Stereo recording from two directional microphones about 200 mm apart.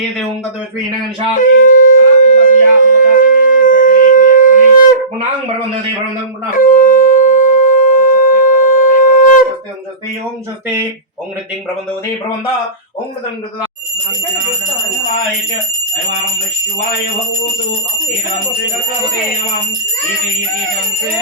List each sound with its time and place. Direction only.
1.4 s wind instrument: 40° left (ahead or behind)
6.5 s wind instrument: 45° left (ahead or behind)